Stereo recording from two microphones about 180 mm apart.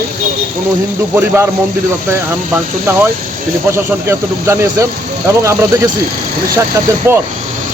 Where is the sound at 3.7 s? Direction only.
15° right (ahead or behind).